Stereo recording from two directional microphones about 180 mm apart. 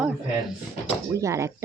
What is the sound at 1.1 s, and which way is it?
Speech, 15° right (ahead or behind).